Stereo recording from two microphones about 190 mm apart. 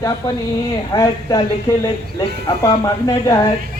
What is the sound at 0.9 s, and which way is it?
A man's voice, 15° left (ahead or behind).